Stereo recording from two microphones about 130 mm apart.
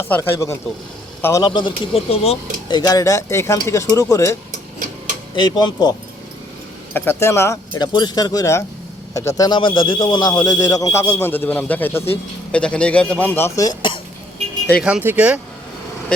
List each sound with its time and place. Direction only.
0.0 s speech: 20° left (ahead or behind)
1.5 s speech: 40° left (ahead or behind)
2.6 s speech: 30° left (ahead or behind)
5.5 s speech: 35° left (ahead or behind)
6.9 s speech: 15° left (ahead or behind)
7.8 s speech: 35° left (ahead or behind); by 13.7 s 15° left (ahead or behind)
13.7 s a sound: 40° left (ahead or behind)
14.8 s speech: 10° right (ahead or behind)